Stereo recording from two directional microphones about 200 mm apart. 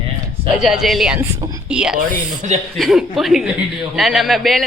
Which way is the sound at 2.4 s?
40° right (ahead or behind).